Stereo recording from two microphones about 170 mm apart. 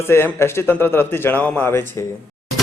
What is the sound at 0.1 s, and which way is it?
Speech, 15° left (ahead or behind).